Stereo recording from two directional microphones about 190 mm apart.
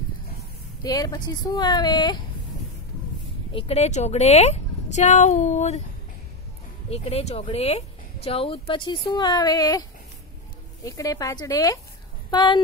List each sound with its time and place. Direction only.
0.8 s speech: 20° left (ahead or behind)
3.5 s a woman's voice: 35° left (ahead or behind)
6.9 s speech: 35° left (ahead or behind)